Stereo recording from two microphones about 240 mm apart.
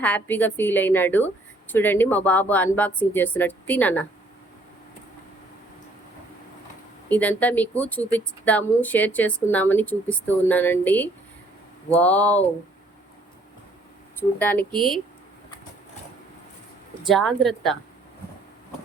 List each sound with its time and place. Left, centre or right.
0.0 s speech: centre
7.1 s speech: centre
14.2 s speech: centre
17.1 s speech: centre